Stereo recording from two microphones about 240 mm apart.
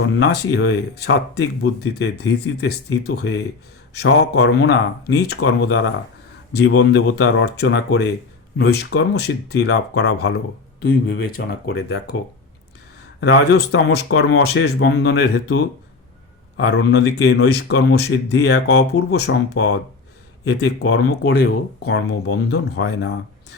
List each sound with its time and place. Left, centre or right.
0.0 s speech: left
13.1 s speech: left
16.6 s speech: left